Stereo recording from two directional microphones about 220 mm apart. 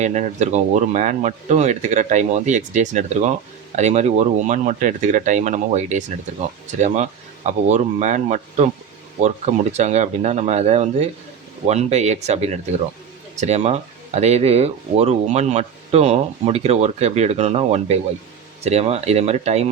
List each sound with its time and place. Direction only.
0.0 s speech: 35° right (ahead or behind)